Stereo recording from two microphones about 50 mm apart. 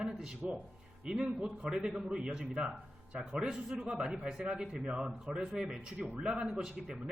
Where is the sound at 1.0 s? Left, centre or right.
Centre.